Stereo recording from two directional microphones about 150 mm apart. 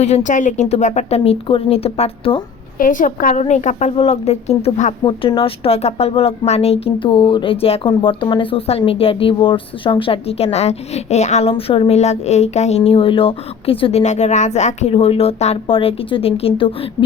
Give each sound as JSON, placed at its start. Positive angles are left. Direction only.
{"t": 0.0, "sound": "a woman's voice", "side_deg": 50}
{"t": 2.7, "sound": "a woman's voice", "side_deg": 65}
{"t": 5.0, "sound": "speech", "side_deg": 35}